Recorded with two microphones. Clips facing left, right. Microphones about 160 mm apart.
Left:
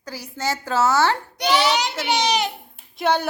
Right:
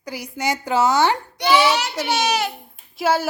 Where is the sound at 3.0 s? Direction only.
5° right (ahead or behind).